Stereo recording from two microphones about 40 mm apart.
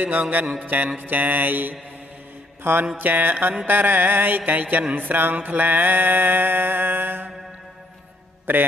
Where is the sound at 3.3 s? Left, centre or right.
Right.